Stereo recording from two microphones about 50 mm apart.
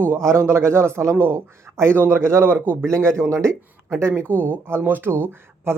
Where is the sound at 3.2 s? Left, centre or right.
Right.